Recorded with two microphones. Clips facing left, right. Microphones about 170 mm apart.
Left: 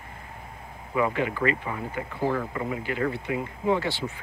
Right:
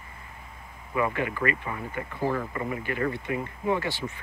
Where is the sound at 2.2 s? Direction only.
Centre (ahead or behind).